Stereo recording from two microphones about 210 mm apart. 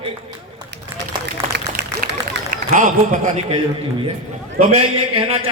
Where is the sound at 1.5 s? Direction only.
50° right (ahead or behind).